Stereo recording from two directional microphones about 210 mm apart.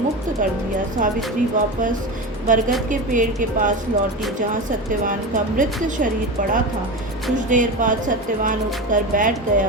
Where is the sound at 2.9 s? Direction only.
40° right (ahead or behind).